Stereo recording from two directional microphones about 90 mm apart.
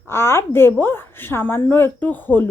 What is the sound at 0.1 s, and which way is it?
A woman's voice, 30° left (ahead or behind).